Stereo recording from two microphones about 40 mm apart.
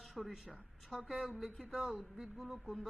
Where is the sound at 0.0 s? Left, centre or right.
Centre.